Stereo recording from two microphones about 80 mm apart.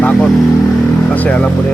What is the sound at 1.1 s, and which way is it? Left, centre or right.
Speech, left.